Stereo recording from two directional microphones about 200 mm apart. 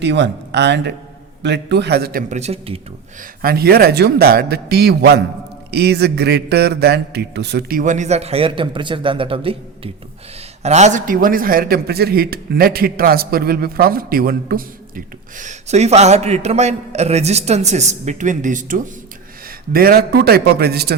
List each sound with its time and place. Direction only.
0.0 s speech: 60° right (ahead or behind)
2.4 s speech: 30° right (ahead or behind)
3.4 s a man's voice: 50° right (ahead or behind)